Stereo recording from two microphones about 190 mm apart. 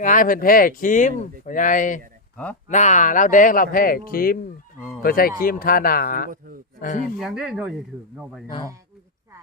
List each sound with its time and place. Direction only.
0.0 s speech: 45° left (ahead or behind)
7.2 s speech: 5° right (ahead or behind)